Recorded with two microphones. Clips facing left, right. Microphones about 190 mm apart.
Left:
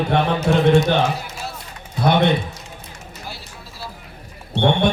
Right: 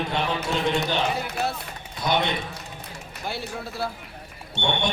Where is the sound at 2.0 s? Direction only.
60° left (ahead or behind).